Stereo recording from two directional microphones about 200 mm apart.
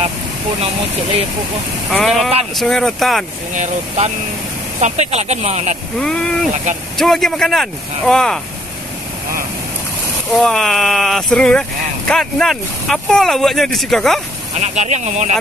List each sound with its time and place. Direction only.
1.9 s speech: centre (ahead or behind)
3.5 s speech: 35° right (ahead or behind)
5.9 s speech: 5° left (ahead or behind)
10.3 s speech: centre (ahead or behind)
14.5 s speech: 35° right (ahead or behind)